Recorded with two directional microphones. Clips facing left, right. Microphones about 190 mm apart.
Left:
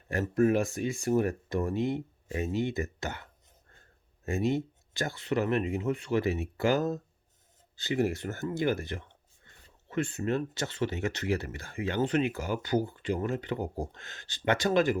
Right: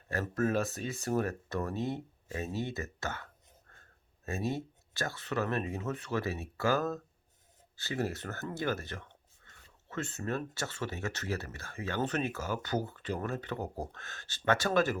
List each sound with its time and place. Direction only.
0.1 s speech: 15° left (ahead or behind)
4.3 s speech: 15° left (ahead or behind)